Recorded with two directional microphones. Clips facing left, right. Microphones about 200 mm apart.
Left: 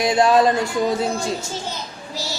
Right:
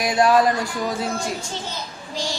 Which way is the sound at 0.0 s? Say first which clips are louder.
Left 2 dB; 25° left (ahead or behind).